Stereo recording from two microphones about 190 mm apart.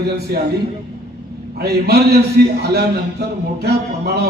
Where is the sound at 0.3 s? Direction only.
50° right (ahead or behind).